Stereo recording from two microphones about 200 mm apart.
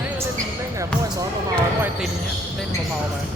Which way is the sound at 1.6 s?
10° right (ahead or behind).